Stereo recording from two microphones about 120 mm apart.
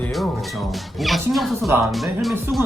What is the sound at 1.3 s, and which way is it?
Speech, centre (ahead or behind).